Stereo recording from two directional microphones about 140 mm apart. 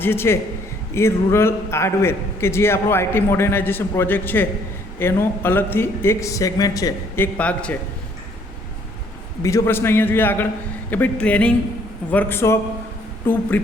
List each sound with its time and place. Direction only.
0.0 s a man's voice: 15° left (ahead or behind)
7.2 s a man's voice: 10° left (ahead or behind)
9.4 s a man's voice: 20° left (ahead or behind)